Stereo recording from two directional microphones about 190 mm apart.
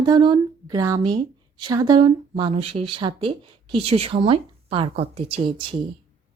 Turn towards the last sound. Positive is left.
turn(degrees=-30)  # may be behind; listen again after turning